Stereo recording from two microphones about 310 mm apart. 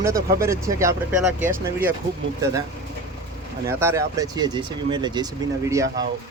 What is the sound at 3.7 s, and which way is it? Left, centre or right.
Speech, centre.